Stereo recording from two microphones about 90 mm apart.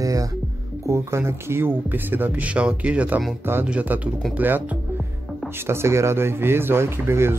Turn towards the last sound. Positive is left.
turn(degrees=-30)  # may be behind; listen again after turning